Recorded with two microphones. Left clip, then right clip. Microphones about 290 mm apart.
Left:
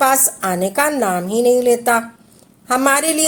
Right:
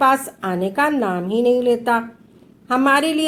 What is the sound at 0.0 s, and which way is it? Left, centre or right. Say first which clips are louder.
A woman's voice: left 1 dB; left.